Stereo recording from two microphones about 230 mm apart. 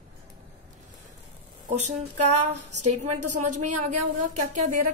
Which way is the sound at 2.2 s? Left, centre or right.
Right.